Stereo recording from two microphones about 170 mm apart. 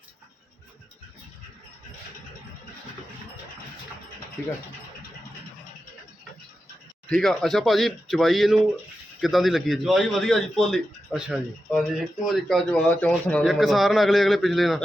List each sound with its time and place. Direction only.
7.1 s a man's voice: centre (ahead or behind)